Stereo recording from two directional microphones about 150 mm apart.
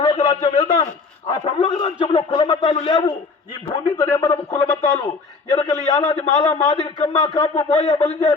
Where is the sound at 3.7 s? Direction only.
30° left (ahead or behind).